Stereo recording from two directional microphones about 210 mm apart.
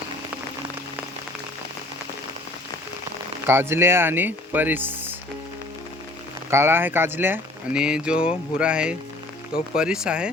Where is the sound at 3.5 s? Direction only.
10° right (ahead or behind).